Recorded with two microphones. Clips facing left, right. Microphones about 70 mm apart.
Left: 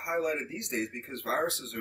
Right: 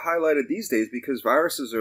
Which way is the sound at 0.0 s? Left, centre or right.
Right.